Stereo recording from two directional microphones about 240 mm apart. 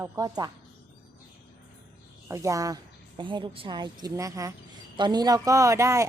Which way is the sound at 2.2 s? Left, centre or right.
Centre.